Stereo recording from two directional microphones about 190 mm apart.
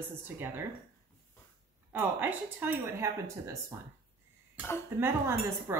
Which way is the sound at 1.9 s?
10° right (ahead or behind).